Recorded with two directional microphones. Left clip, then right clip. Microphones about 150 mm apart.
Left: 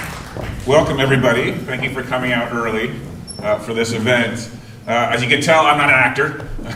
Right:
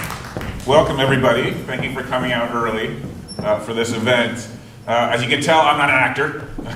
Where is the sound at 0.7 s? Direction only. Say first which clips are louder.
Even; 35° left (ahead or behind).